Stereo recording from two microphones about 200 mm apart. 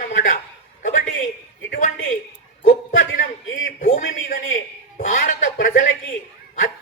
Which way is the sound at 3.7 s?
40° left (ahead or behind).